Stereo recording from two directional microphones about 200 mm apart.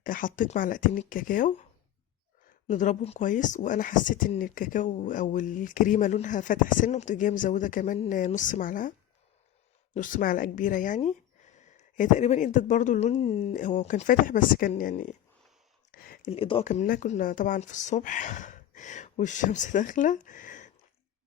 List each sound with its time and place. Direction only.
0.0 s speech: 45° left (ahead or behind)
2.6 s speech: 40° left (ahead or behind)
9.9 s speech: 40° left (ahead or behind)
15.9 s a sound: 50° left (ahead or behind)
16.3 s speech: 30° left (ahead or behind)